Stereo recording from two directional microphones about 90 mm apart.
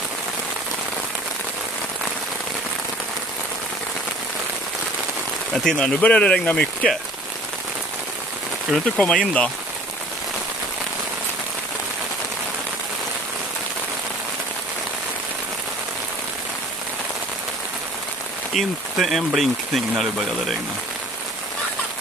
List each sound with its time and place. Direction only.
5.5 s speech: 5° left (ahead or behind)
8.8 s speech: 10° left (ahead or behind)
18.5 s speech: centre (ahead or behind)